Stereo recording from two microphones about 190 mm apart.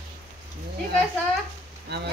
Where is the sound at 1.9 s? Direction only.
60° right (ahead or behind).